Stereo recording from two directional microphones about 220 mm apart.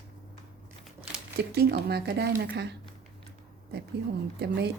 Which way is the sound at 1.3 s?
45° right (ahead or behind).